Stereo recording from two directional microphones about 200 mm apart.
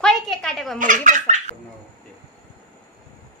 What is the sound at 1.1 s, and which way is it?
Baby laughter, 35° right (ahead or behind).